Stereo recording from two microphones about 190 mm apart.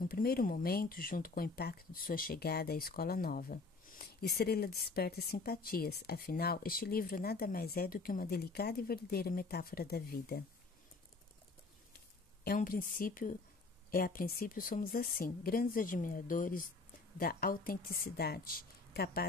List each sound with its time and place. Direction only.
0.0 s speech: 50° left (ahead or behind)
12.4 s speech: 50° left (ahead or behind)